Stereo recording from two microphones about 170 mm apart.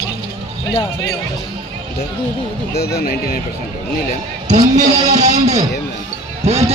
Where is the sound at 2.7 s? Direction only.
70° left (ahead or behind).